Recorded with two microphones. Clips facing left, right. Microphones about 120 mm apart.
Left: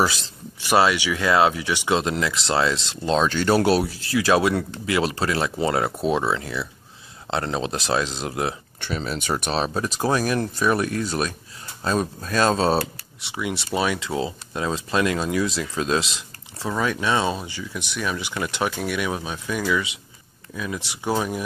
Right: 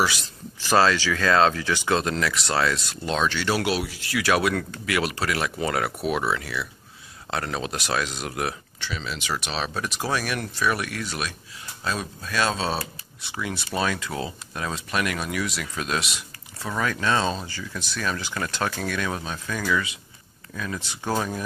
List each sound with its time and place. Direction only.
0.0 s speech: 30° left (ahead or behind)
0.7 s speech: 15° left (ahead or behind)
8.8 s speech: 45° left (ahead or behind)
13.2 s speech: 20° left (ahead or behind)